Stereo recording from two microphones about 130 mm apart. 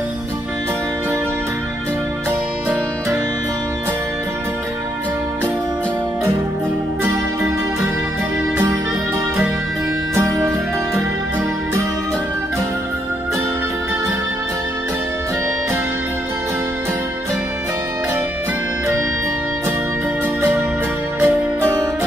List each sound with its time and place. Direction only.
10.1 s music: 20° right (ahead or behind)
21.2 s music: 20° right (ahead or behind)